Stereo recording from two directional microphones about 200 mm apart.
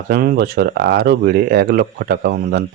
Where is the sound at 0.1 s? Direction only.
50° right (ahead or behind).